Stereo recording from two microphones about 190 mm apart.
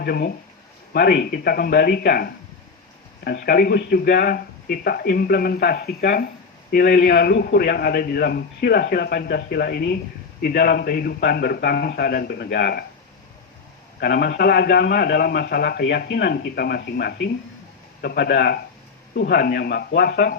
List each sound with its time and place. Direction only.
0.0 s a man's voice: 55° left (ahead or behind)
14.0 s a man's voice: 55° left (ahead or behind)